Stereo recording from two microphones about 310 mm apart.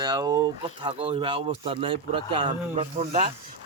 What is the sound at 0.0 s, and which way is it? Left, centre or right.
Speech, centre.